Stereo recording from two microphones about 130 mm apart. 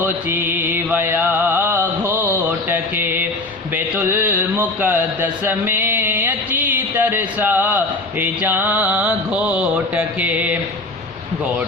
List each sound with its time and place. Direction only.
0.0 s music: 15° right (ahead or behind)
3.8 s a sound: 15° right (ahead or behind)
8.2 s mantra: 15° right (ahead or behind)